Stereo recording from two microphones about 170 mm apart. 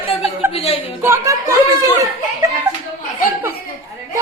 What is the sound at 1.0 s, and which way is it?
Speech, 15° right (ahead or behind).